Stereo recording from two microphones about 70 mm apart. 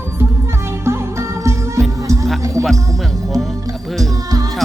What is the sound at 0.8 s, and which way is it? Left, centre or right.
Music, right.